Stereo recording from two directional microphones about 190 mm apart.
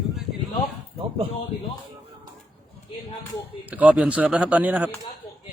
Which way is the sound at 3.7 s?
10° right (ahead or behind).